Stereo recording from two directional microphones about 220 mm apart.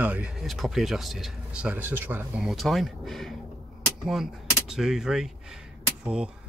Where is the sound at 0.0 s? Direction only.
5° right (ahead or behind).